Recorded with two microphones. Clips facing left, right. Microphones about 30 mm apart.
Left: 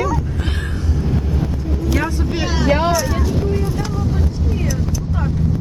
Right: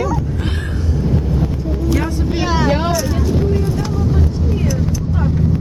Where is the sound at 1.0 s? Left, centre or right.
Centre.